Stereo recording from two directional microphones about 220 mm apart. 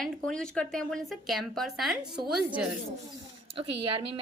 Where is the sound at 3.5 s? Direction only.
25° right (ahead or behind).